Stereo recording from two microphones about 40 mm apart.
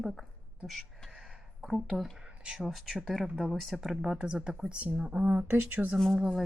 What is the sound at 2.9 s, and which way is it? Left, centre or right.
Speech, centre.